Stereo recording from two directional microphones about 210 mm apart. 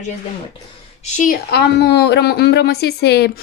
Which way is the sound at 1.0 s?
35° left (ahead or behind).